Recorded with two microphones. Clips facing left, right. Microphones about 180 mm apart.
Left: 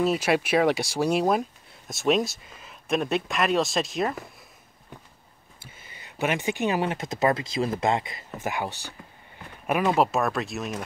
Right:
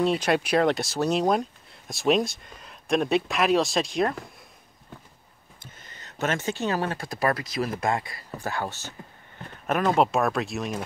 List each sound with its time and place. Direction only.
0.0 s speech: 5° left (ahead or behind)
5.6 s speech: 10° left (ahead or behind)